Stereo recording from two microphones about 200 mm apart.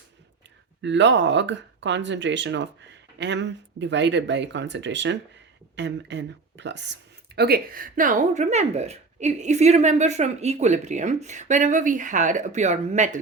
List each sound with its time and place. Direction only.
0.8 s speech: 65° right (ahead or behind); by 13.1 s 35° right (ahead or behind)